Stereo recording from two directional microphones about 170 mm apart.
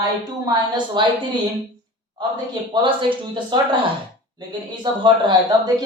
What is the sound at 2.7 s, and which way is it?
Speech, 30° right (ahead or behind).